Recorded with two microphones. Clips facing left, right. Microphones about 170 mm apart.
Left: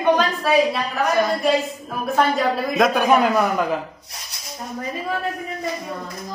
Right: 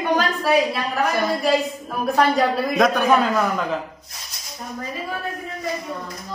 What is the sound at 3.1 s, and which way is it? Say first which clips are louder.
Speech: left 1 dB; 15° left (ahead or behind).